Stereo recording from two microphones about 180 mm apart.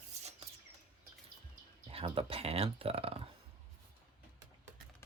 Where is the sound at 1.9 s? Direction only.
30° right (ahead or behind).